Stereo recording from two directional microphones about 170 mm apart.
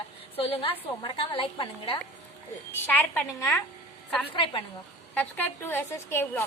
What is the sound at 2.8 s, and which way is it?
Speech, 10° left (ahead or behind).